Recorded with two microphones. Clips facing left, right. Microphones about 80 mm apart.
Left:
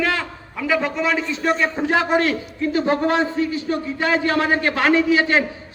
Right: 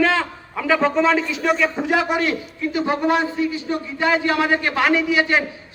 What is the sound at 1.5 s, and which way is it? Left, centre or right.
A man's voice, left.